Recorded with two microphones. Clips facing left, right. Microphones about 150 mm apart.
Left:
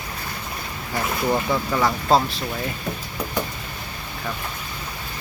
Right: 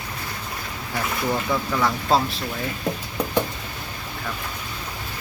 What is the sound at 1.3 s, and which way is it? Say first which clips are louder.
Speech: left 2 dB; 20° left (ahead or behind).